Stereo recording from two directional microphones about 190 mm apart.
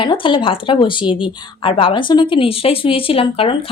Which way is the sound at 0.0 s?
25° left (ahead or behind).